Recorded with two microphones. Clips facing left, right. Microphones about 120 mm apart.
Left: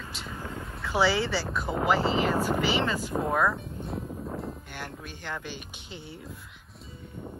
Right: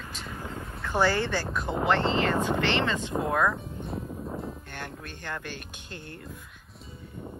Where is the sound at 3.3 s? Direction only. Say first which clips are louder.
Even; 5° left (ahead or behind).